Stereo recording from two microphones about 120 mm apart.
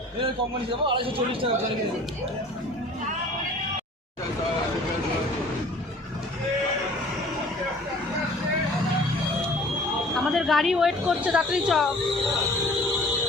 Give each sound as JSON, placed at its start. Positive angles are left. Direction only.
{"t": 0.9, "sound": "a man's voice", "side_deg": -45}
{"t": 10.2, "sound": "a woman's voice", "side_deg": 0}